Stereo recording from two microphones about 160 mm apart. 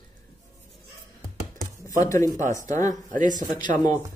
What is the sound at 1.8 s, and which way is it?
Speech, 20° left (ahead or behind).